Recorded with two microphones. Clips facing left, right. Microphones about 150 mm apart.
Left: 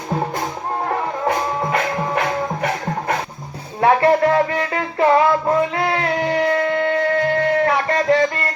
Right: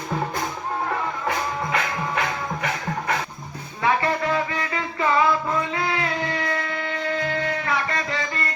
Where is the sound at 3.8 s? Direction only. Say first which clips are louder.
Left 8 dB; 60° left (ahead or behind).